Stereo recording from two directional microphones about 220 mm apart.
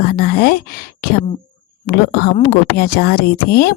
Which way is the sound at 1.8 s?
45° left (ahead or behind).